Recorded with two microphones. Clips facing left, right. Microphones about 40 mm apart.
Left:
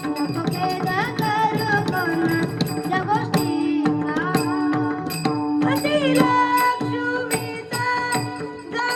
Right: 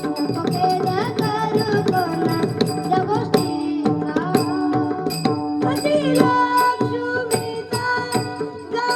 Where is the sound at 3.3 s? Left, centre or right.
Left.